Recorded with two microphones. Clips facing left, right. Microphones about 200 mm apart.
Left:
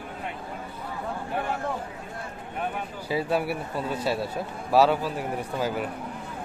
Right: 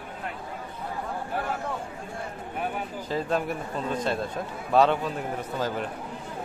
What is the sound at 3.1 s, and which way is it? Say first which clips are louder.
A man's voice: left 2 dB; 10° left (ahead or behind).